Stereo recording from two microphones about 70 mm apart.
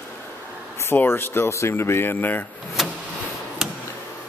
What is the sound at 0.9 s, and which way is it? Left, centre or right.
Speech, left.